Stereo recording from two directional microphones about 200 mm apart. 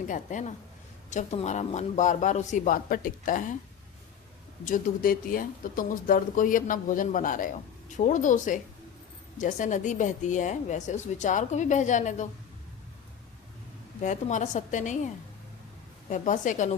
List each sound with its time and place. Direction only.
0.1 s speech: 40° left (ahead or behind)
4.6 s speech: 45° left (ahead or behind)
14.0 s speech: 40° left (ahead or behind)
16.0 s speech: 40° left (ahead or behind)